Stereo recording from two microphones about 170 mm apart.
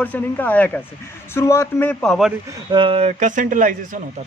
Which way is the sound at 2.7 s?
35° right (ahead or behind).